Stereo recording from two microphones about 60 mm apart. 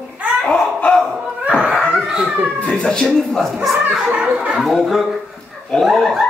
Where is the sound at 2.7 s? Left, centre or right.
Centre.